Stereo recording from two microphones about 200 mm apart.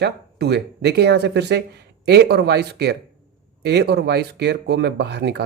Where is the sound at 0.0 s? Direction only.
55° right (ahead or behind).